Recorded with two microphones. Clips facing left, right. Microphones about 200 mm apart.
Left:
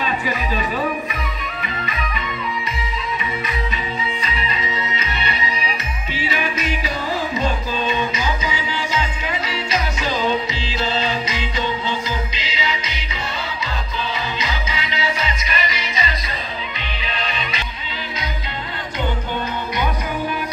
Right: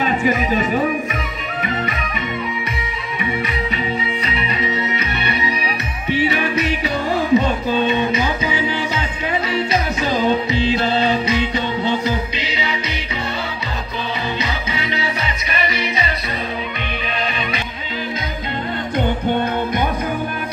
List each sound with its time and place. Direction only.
0.0 s speech: 50° right (ahead or behind)
3.7 s music: 65° right (ahead or behind)
10.1 s music: 55° right (ahead or behind)